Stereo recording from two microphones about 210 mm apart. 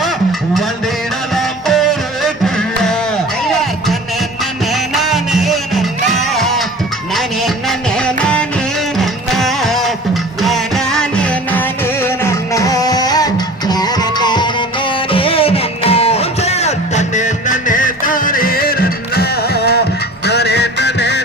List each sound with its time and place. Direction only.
1.4 s music: centre (ahead or behind)
4.7 s music: centre (ahead or behind); by 21.2 s 55° left (ahead or behind)